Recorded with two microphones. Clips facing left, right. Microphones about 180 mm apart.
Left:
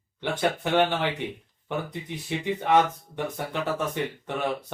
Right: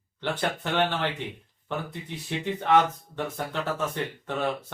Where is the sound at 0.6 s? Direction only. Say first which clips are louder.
Left 3 dB; 10° left (ahead or behind).